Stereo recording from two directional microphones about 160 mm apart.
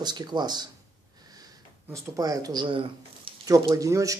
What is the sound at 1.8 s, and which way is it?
Speech, 20° right (ahead or behind).